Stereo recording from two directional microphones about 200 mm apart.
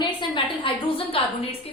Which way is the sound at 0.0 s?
25° left (ahead or behind).